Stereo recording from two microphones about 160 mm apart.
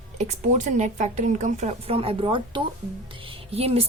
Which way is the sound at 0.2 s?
50° right (ahead or behind).